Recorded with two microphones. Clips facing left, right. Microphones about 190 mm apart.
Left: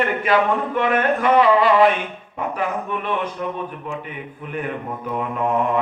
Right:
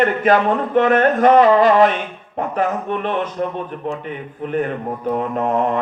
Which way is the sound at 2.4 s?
40° right (ahead or behind).